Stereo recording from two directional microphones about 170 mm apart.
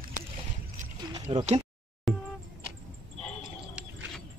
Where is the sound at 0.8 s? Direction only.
45° right (ahead or behind).